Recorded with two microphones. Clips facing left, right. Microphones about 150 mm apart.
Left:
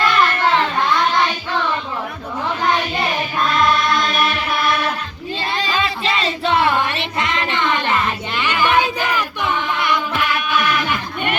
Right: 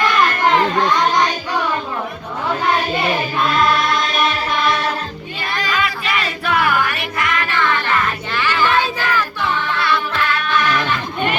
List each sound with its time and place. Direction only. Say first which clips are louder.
0.4 s music: right 2 dB; 20° right (ahead or behind)
5.4 s music: even; 25° left (ahead or behind)